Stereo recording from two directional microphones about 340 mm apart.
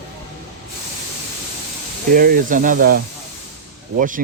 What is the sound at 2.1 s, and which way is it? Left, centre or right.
Speech, right.